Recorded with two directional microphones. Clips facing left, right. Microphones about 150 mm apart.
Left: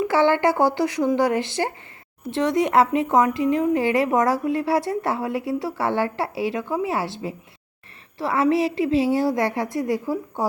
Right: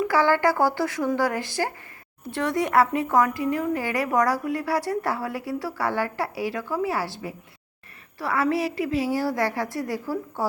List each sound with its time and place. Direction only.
0.0 s speech: 25° left (ahead or behind)